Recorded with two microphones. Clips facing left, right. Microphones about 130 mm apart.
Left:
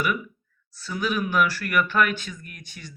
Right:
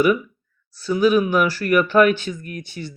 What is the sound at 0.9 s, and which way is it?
Speech, 30° right (ahead or behind).